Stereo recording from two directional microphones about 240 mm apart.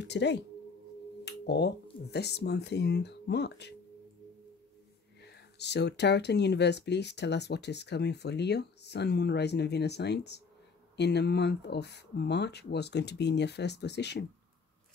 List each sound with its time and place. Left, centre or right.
0.0 s speech: left
5.2 s speech: left